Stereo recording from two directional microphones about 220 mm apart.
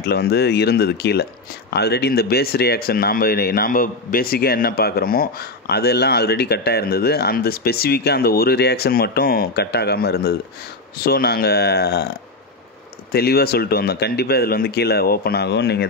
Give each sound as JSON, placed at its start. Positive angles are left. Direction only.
{"t": 0.0, "sound": "speech", "side_deg": 45}
{"t": 13.1, "sound": "speech", "side_deg": 45}